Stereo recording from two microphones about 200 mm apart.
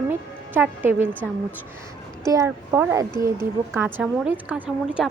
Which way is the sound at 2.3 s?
15° right (ahead or behind).